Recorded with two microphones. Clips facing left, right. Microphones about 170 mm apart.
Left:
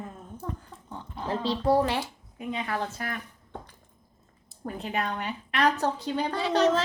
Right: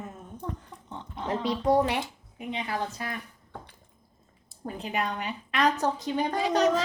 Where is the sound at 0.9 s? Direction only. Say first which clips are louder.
Even; 20° right (ahead or behind).